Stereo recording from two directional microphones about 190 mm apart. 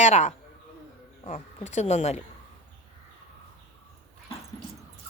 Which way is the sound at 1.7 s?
35° left (ahead or behind).